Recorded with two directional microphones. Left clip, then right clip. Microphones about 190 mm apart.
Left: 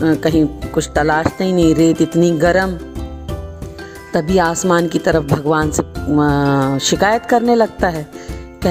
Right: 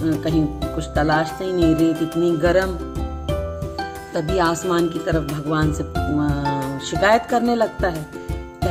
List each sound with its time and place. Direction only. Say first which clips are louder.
0.0 s speech: left 7 dB; 50° left (ahead or behind)
4.1 s speech: left 5 dB; 50° left (ahead or behind)